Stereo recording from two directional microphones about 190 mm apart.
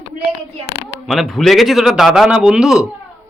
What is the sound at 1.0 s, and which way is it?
A man's voice, centre (ahead or behind).